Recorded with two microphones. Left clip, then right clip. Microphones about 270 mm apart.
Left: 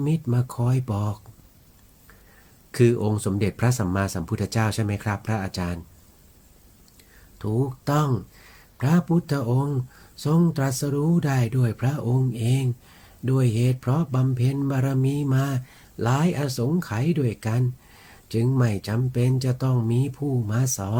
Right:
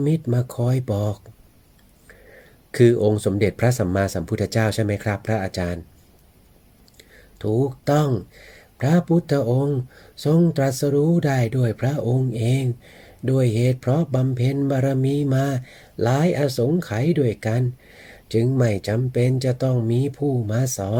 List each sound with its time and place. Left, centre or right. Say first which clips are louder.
0.0 s speech: right 5 dB; centre
2.7 s speech: right 5 dB; centre
6.9 s speech: right 6 dB; centre